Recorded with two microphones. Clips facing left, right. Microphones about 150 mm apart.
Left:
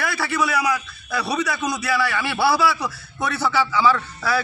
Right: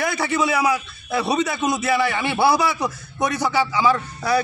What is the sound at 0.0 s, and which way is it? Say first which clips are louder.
A man's voice: right 2 dB; 20° right (ahead or behind).